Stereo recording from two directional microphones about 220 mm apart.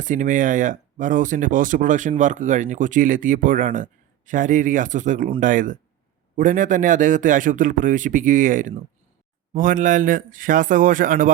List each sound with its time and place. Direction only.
0.0 s speech: 35° right (ahead or behind)